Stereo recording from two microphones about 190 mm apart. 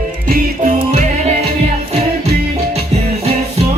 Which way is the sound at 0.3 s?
40° right (ahead or behind).